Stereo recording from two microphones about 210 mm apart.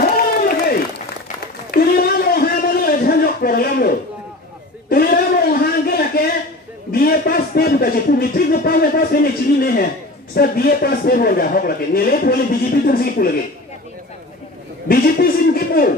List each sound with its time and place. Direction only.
0.5 s applause: 45° left (ahead or behind)
1.7 s a sound: 45° left (ahead or behind)
10.3 s a man's voice: 45° left (ahead or behind)
14.9 s chuckle: 45° left (ahead or behind)